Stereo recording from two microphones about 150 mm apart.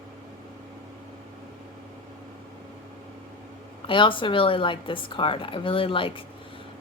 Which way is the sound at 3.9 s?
35° left (ahead or behind).